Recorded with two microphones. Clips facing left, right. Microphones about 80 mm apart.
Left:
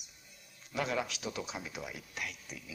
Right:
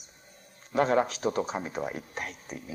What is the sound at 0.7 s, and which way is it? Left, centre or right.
Speech, right.